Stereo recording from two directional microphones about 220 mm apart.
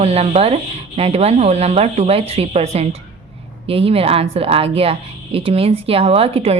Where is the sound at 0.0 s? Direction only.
25° right (ahead or behind).